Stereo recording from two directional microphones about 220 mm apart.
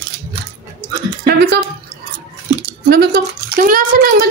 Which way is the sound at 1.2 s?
50° right (ahead or behind).